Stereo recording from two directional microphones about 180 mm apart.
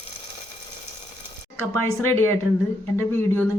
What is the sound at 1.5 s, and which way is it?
Speech, 10° left (ahead or behind).